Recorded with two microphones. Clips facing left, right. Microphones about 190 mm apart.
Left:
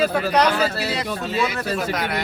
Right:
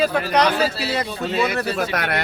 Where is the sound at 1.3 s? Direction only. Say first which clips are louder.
Right 2 dB; 60° right (ahead or behind).